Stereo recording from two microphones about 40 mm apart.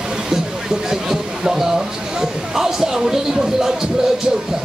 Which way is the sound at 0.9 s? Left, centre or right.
Centre.